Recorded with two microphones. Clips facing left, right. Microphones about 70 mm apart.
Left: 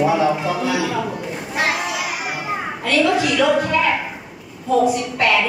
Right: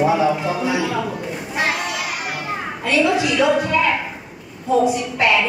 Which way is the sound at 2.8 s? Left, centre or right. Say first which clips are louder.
Even; centre.